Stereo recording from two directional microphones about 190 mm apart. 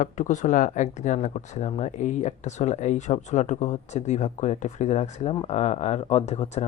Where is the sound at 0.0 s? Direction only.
40° left (ahead or behind).